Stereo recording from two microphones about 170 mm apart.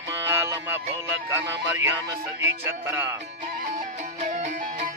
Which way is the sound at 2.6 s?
15° right (ahead or behind).